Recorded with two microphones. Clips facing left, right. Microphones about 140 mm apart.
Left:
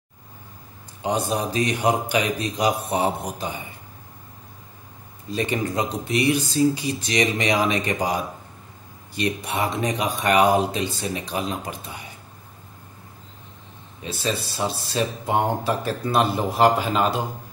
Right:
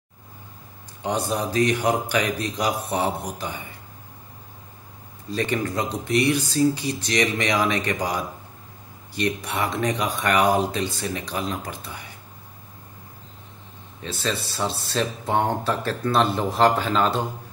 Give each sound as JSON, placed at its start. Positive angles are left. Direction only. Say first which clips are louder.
{"t": 1.0, "sound": "speech", "louder": "left 1 dB", "side_deg": 20}
{"t": 5.3, "sound": "speech", "louder": "even", "side_deg": 15}
{"t": 14.0, "sound": "speech", "louder": "left 1 dB", "side_deg": 10}